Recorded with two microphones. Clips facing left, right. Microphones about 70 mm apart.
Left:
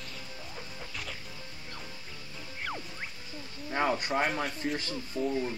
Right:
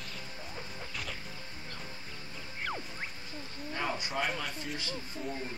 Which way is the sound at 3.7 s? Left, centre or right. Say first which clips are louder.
Left 6 dB; left.